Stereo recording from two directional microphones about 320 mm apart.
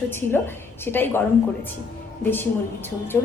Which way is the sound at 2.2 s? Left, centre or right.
Centre.